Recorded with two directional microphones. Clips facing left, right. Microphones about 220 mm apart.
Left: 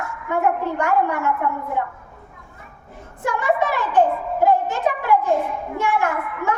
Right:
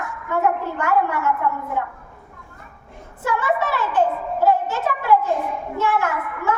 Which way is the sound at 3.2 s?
15° left (ahead or behind).